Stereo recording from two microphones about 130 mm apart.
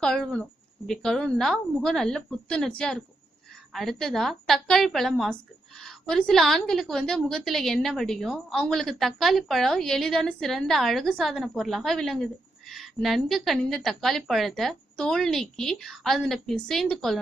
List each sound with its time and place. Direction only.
0.0 s a woman's voice: 5° left (ahead or behind)